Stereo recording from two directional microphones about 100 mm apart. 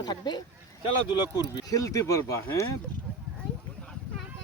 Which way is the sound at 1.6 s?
35° left (ahead or behind).